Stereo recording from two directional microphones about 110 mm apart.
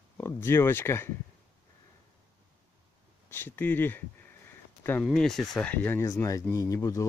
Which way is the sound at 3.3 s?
20° left (ahead or behind).